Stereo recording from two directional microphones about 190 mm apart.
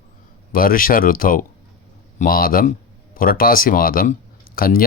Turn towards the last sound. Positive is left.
turn(degrees=50)  # may be behind; listen again after turning